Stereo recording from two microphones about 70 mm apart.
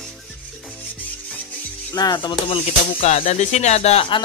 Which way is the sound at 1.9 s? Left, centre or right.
Left.